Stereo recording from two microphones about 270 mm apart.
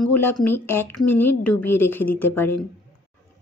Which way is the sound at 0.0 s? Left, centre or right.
Centre.